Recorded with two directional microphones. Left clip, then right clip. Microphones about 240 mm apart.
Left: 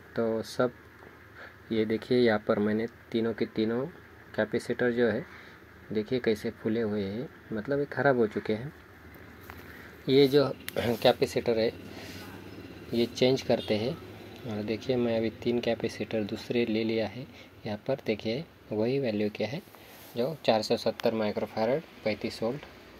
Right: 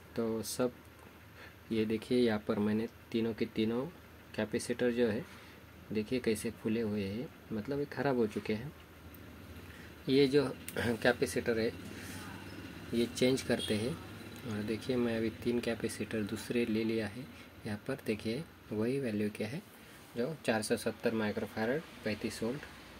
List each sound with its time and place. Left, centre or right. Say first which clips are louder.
0.1 s speech: left 6 dB; centre
1.7 s speech: left 6 dB; centre
10.1 s speech: left 6 dB; centre
12.9 s speech: left 6 dB; centre